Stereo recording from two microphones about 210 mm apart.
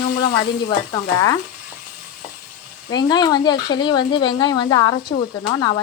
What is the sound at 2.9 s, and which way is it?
Speech, 20° left (ahead or behind).